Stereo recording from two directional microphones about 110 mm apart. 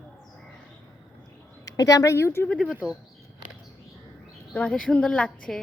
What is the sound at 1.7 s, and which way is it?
Speech, 30° left (ahead or behind).